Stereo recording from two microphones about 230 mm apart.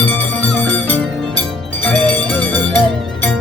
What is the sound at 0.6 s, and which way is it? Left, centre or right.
Music, centre.